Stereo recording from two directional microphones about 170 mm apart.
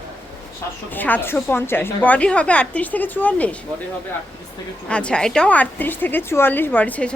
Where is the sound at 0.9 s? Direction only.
10° left (ahead or behind).